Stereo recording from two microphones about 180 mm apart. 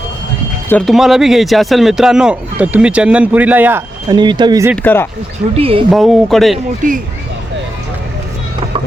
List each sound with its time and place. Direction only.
0.7 s speech: 5° left (ahead or behind)
4.1 s speech: 25° right (ahead or behind)
4.8 s speech: 10° left (ahead or behind)
5.5 s speech: 30° right (ahead or behind)
5.9 s speech: centre (ahead or behind)
6.8 s speech: 45° right (ahead or behind)